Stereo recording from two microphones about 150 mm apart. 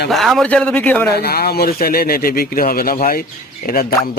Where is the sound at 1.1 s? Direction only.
90° left.